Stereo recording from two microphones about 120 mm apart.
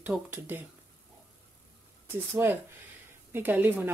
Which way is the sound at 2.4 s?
20° right (ahead or behind).